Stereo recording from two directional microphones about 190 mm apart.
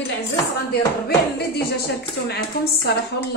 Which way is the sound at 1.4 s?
60° left (ahead or behind).